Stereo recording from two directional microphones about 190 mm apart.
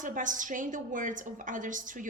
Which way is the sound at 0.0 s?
45° right (ahead or behind).